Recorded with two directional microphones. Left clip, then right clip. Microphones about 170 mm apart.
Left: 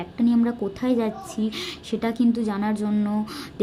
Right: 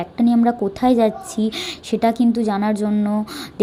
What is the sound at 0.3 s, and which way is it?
A woman's voice, 20° right (ahead or behind).